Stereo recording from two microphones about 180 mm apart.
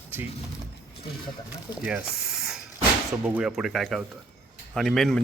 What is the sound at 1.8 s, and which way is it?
Spray, 5° right (ahead or behind).